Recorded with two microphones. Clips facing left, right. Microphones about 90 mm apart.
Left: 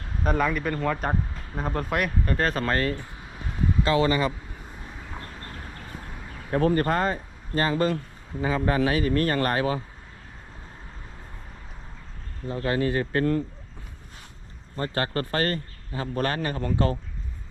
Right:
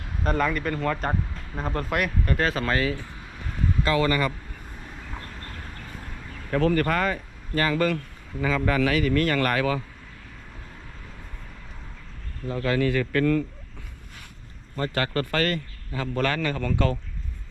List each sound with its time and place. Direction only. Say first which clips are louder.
0.2 s speech: even; 5° left (ahead or behind)
3.8 s a man's voice: even; 25° left (ahead or behind)
5.2 s train: even; 20° left (ahead or behind)
5.8 s vehicle: even; 15° left (ahead or behind)
6.5 s a man's voice: even; 25° left (ahead or behind)
12.7 s speech: right 1 dB; 30° left (ahead or behind)
14.8 s a man's voice: right 1 dB; 30° left (ahead or behind)